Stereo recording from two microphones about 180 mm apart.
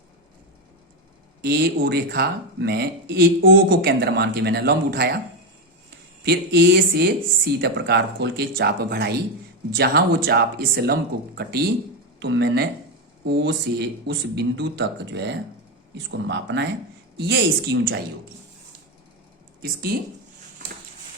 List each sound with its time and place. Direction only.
1.4 s speech: 60° right (ahead or behind)
6.2 s speech: 65° right (ahead or behind)
19.9 s speech: 60° right (ahead or behind)